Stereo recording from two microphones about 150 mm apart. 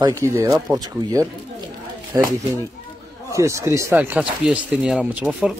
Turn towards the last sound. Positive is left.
turn(degrees=-5)  # may be behind; listen again after turning